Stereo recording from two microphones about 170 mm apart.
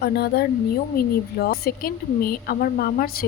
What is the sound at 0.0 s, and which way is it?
Speech, 70° left (ahead or behind).